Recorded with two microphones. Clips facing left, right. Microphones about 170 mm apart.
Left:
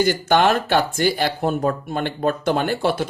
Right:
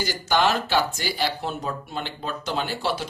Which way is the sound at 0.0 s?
55° left (ahead or behind).